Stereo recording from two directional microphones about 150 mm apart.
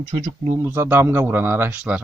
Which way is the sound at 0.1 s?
20° right (ahead or behind).